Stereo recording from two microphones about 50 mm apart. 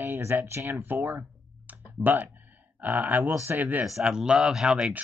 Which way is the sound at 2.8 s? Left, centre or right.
Right.